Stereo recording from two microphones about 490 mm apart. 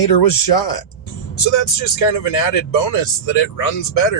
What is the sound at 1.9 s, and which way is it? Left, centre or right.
Speech, left.